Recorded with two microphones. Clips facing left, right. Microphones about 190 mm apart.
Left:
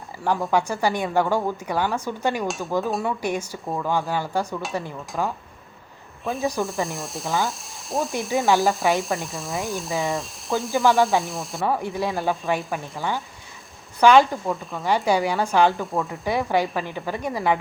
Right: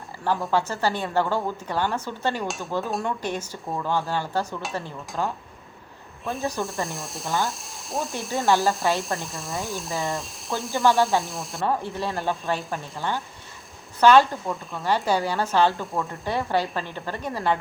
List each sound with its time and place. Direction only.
0.5 s a woman's voice: 15° left (ahead or behind)
2.5 s speech: centre (ahead or behind)
3.2 s a woman's voice: 10° left (ahead or behind)
6.3 s speech: centre (ahead or behind)
8.4 s a woman's voice: 15° left (ahead or behind)
9.0 s speech: centre (ahead or behind)
11.6 s a woman's voice: 10° left (ahead or behind)
14.4 s speech: centre (ahead or behind)
14.8 s a woman's voice: 15° left (ahead or behind)
15.7 s speech: centre (ahead or behind)
16.2 s a woman's voice: 15° left (ahead or behind)